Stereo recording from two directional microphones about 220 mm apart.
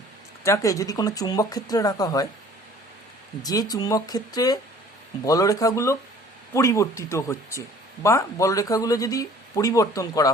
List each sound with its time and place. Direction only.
0.4 s speech: 15° left (ahead or behind)
3.4 s speech: 15° left (ahead or behind)